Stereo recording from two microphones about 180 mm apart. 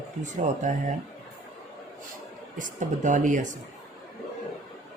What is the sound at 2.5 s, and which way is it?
Speech, 45° right (ahead or behind).